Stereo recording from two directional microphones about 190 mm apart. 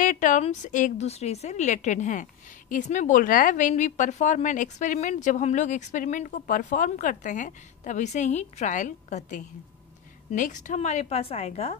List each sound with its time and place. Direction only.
0.0 s a woman's voice: 45° left (ahead or behind)